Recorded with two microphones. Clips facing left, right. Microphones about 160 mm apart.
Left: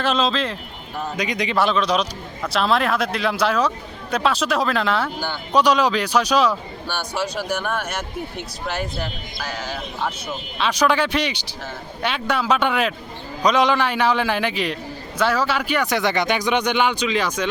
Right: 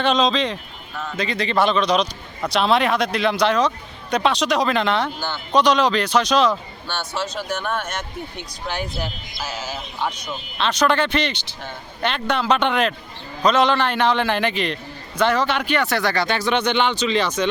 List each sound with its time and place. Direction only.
0.0 s speech: 5° left (ahead or behind)
1.1 s speech: 15° left (ahead or behind); by 9.7 s 5° right (ahead or behind)
10.1 s speech: 10° left (ahead or behind)